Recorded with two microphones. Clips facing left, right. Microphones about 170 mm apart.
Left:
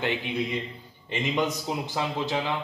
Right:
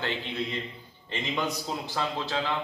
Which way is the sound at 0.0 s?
15° left (ahead or behind).